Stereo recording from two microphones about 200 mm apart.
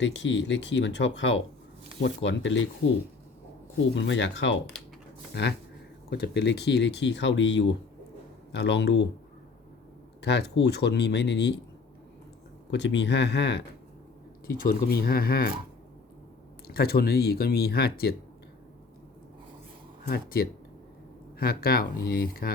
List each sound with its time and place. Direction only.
0.0 s speech: 65° left (ahead or behind)
3.9 s speech: 65° left (ahead or behind)
10.2 s speech: 60° left (ahead or behind)
12.7 s speech: 65° left (ahead or behind)
14.4 s speech: 45° left (ahead or behind)
16.6 s speech: 50° left (ahead or behind)
20.1 s speech: 50° left (ahead or behind)